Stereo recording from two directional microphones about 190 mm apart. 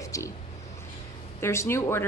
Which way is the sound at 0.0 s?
15° left (ahead or behind).